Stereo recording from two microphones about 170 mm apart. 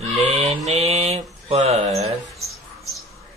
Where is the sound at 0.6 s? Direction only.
35° right (ahead or behind).